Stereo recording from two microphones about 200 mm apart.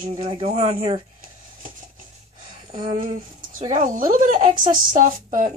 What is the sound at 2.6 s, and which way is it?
Speech, 30° right (ahead or behind).